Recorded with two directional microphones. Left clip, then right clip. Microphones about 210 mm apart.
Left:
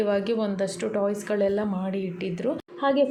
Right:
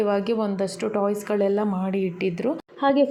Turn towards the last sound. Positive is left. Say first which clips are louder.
# right 2 dB
turn(degrees=-25)  # may be behind; listen again after turning